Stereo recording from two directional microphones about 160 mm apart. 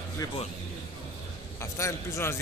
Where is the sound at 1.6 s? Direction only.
15° left (ahead or behind).